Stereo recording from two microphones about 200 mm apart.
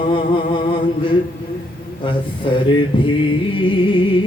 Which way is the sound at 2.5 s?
25° left (ahead or behind).